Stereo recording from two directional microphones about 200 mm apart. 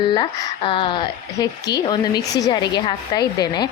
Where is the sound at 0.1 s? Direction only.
25° left (ahead or behind).